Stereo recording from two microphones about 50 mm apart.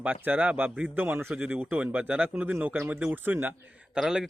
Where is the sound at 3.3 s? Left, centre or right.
Right.